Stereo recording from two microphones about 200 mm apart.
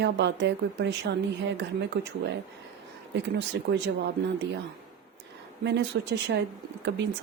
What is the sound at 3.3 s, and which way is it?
Speech, 60° right (ahead or behind).